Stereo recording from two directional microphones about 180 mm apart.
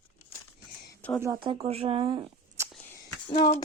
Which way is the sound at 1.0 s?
10° left (ahead or behind).